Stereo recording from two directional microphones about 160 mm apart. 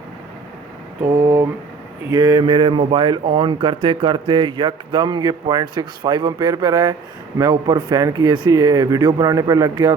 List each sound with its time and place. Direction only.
1.0 s speech: 20° right (ahead or behind)